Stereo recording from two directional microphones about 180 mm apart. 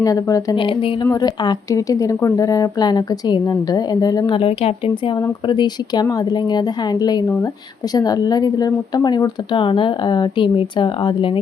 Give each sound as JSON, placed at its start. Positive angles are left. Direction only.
{"t": 0.0, "sound": "speech", "side_deg": 20}